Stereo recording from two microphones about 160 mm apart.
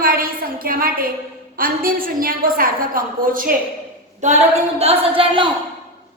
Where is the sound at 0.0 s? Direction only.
65° right (ahead or behind).